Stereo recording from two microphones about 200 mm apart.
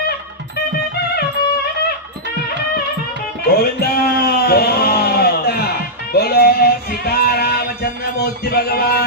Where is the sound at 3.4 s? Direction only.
50° left (ahead or behind).